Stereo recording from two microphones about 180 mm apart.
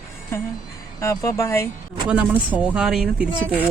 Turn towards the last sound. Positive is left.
turn(degrees=-5)  # may be behind; listen again after turning